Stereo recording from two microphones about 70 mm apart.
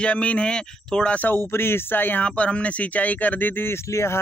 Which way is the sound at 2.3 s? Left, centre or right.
Centre.